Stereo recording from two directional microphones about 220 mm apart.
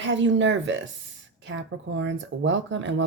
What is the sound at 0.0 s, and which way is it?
Speech, 55° right (ahead or behind).